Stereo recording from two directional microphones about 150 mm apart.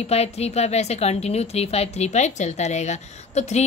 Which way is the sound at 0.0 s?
45° left (ahead or behind).